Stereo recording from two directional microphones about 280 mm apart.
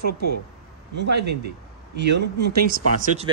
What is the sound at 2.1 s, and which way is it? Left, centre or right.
Speech, right.